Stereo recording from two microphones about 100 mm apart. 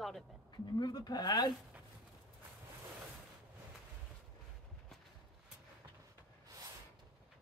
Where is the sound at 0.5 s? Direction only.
45° left (ahead or behind).